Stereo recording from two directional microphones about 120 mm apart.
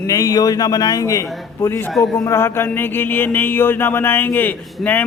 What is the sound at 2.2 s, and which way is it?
Mantra, 20° left (ahead or behind).